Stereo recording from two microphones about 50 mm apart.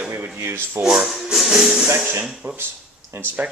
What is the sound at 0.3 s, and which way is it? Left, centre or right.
Speech, right.